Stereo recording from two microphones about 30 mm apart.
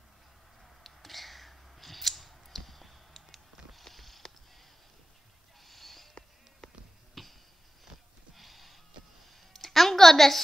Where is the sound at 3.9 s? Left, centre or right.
Centre.